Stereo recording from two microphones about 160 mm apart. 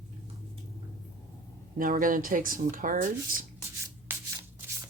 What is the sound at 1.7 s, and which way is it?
Speech, 60° right (ahead or behind).